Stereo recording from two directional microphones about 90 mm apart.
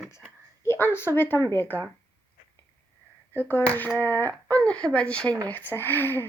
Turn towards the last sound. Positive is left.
turn(degrees=25)  # may be behind; listen again after turning